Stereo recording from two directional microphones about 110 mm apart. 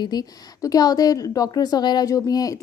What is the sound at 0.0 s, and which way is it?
A woman's voice, 35° left (ahead or behind).